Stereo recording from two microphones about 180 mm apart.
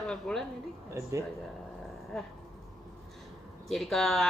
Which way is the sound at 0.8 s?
15° right (ahead or behind).